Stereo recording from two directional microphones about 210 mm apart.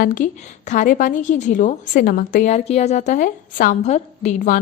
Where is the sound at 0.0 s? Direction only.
40° left (ahead or behind).